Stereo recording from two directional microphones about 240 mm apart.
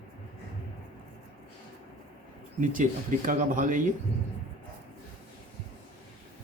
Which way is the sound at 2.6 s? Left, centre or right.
Right.